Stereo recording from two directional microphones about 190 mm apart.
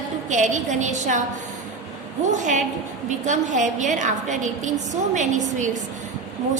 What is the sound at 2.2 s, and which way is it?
A woman's voice, 40° right (ahead or behind).